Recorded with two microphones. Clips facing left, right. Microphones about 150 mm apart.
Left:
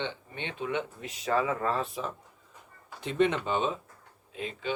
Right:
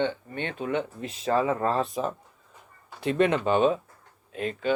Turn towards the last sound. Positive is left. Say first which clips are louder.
# right 6 dB
turn(degrees=-50)  # may be behind; listen again after turning